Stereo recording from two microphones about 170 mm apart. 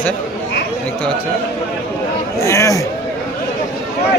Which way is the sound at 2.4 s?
20° left (ahead or behind).